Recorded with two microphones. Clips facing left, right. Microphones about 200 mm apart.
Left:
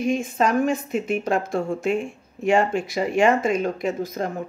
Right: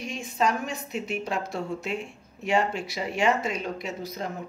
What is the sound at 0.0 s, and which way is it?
A woman's voice, 50° left (ahead or behind).